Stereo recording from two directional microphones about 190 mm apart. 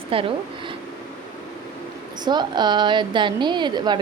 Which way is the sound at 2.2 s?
25° right (ahead or behind).